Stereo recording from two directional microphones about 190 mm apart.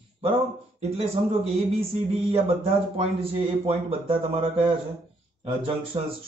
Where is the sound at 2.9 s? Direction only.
30° right (ahead or behind).